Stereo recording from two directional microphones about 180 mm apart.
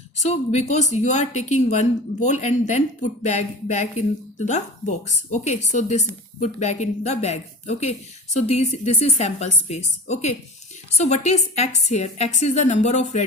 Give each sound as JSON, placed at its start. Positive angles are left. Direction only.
{"t": 0.2, "sound": "speech", "side_deg": 40}